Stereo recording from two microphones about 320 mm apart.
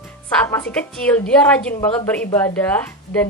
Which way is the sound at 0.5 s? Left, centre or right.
Centre.